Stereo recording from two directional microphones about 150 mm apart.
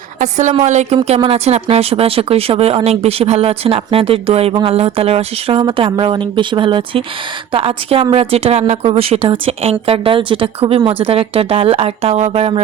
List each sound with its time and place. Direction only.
0.2 s a woman's voice: 55° right (ahead or behind)